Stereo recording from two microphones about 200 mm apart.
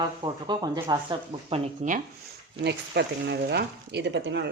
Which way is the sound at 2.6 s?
55° right (ahead or behind).